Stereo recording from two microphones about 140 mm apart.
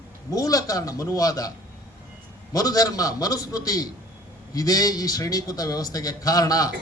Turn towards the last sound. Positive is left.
turn(degrees=25)  # may be behind; listen again after turning